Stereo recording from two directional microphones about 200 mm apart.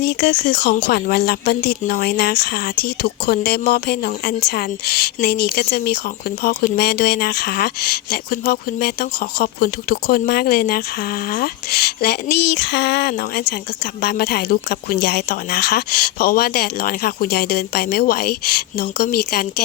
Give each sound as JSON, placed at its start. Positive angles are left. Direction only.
{"t": 0.0, "sound": "speech", "side_deg": 55}